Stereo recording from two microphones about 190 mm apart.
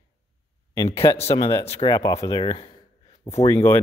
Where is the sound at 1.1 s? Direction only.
30° left (ahead or behind).